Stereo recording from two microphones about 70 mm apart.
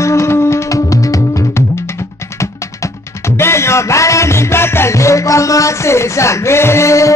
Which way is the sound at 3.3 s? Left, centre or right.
Left.